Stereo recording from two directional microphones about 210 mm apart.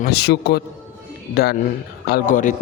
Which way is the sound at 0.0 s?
55° left (ahead or behind).